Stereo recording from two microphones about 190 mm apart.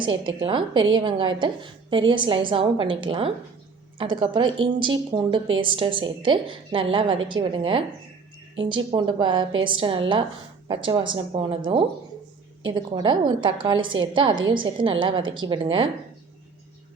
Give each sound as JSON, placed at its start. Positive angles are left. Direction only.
{"t": 0.0, "sound": "a woman's voice", "side_deg": -25}